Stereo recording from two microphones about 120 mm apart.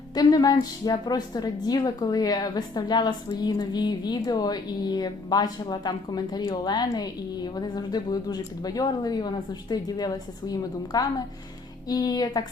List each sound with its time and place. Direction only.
0.1 s a woman's voice: 35° left (ahead or behind)